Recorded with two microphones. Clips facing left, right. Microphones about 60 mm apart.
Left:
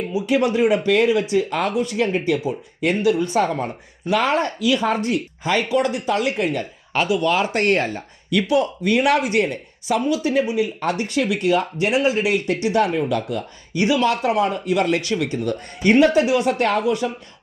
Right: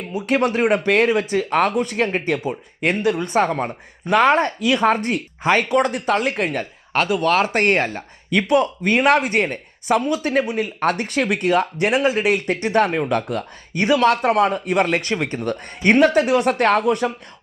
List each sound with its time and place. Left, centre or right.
0.1 s speech: right